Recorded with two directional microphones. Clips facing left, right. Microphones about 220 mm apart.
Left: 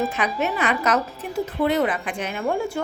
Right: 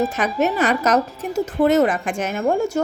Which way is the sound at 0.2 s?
40° right (ahead or behind).